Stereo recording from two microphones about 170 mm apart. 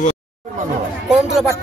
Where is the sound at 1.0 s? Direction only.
5° right (ahead or behind).